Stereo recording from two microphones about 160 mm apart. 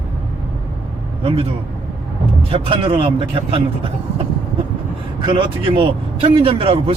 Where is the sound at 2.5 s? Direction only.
35° right (ahead or behind).